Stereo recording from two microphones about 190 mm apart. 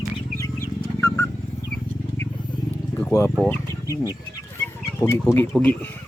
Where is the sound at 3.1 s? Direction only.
15° left (ahead or behind).